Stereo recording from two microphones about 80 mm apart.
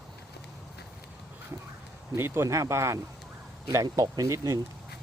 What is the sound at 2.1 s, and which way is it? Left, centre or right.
Speech, right.